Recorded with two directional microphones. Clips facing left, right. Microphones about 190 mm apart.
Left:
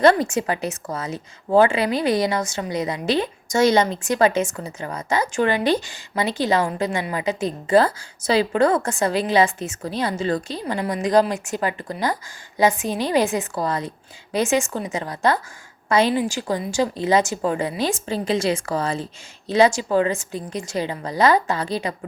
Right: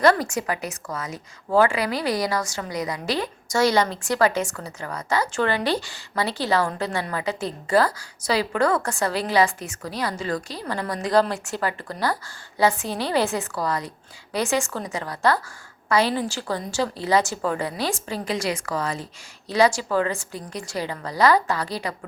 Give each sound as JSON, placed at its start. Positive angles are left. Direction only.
{"t": 0.0, "sound": "a woman's voice", "side_deg": 25}